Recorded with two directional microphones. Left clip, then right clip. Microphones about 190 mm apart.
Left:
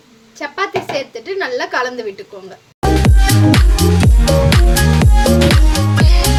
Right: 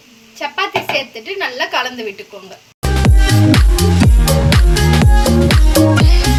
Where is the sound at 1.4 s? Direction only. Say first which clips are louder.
Even; 60° left (ahead or behind).